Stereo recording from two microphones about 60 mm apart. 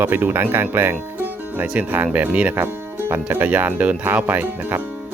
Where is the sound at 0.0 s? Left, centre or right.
Right.